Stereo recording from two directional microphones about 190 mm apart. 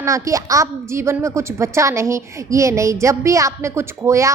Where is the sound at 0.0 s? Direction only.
15° right (ahead or behind).